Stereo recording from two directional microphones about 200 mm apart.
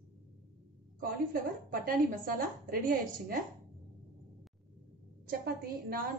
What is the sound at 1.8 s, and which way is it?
A woman's voice, 45° right (ahead or behind).